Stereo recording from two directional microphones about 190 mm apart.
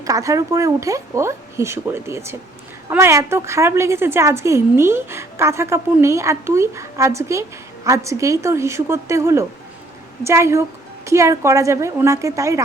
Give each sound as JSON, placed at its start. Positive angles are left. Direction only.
{"t": 0.0, "sound": "a woman's voice", "side_deg": -15}